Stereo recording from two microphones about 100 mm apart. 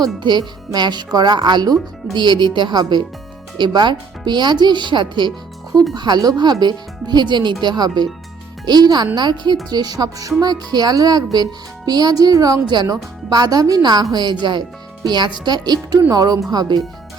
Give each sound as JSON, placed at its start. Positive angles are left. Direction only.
{"t": 0.0, "sound": "speech", "side_deg": -50}